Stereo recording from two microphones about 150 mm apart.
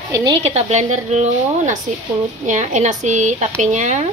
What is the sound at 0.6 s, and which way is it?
Speech, 50° right (ahead or behind).